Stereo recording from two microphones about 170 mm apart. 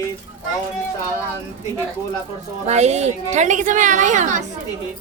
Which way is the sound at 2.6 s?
40° right (ahead or behind).